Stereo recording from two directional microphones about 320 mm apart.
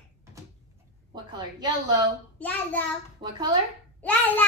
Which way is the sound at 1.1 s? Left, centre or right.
Centre.